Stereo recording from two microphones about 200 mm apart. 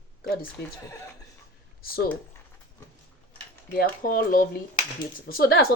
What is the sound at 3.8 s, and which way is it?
Speech, 45° left (ahead or behind).